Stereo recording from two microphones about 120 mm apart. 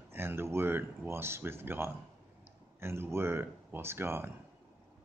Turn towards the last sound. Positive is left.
turn(degrees=-20)  # may be behind; listen again after turning